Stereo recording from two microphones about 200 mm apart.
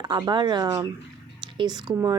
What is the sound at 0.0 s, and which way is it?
Speech, 20° right (ahead or behind).